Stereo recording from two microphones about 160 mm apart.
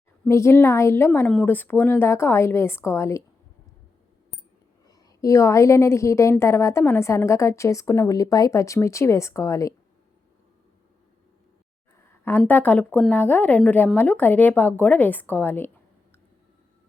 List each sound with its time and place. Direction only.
0.3 s a woman's voice: 15° left (ahead or behind)
4.9 s a woman's voice: 20° left (ahead or behind)
12.5 s a woman's voice: 10° left (ahead or behind)